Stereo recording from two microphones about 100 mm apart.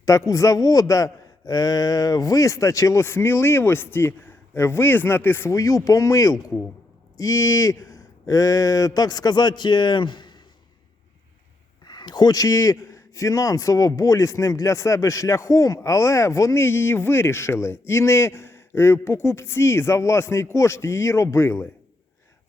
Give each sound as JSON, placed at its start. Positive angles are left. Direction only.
{"t": 0.0, "sound": "a man's voice", "side_deg": 35}
{"t": 11.9, "sound": "speech", "side_deg": 45}